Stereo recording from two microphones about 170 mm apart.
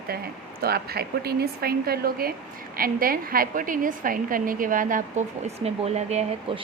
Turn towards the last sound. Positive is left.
turn(degrees=-40)  # may be behind; listen again after turning